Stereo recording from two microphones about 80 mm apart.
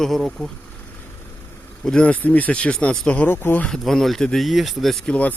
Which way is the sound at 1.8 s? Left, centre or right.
Centre.